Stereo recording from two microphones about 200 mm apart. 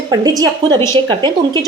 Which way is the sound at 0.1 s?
20° right (ahead or behind).